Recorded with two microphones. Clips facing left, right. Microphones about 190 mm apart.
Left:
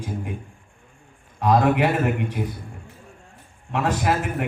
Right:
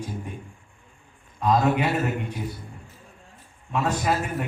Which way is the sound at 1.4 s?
60° left (ahead or behind).